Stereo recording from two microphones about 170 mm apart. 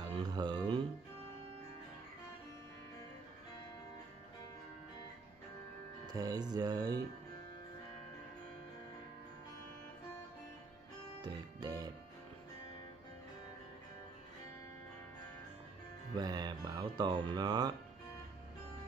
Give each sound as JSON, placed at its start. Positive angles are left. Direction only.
{"t": 0.0, "sound": "speech", "side_deg": -25}
{"t": 6.1, "sound": "speech", "side_deg": -20}
{"t": 11.2, "sound": "speech", "side_deg": -25}
{"t": 16.2, "sound": "speech", "side_deg": -25}